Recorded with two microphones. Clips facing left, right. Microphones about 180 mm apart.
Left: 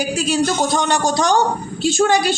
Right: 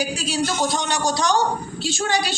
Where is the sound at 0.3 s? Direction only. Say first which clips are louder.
Left 5 dB; 50° left (ahead or behind).